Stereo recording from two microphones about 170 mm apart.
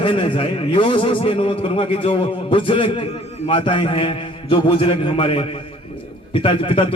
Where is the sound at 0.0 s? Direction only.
30° left (ahead or behind).